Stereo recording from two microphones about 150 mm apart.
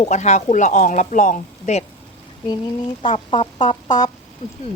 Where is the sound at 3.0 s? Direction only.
35° left (ahead or behind).